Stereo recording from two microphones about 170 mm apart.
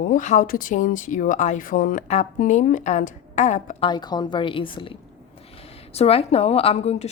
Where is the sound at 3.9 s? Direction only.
25° left (ahead or behind).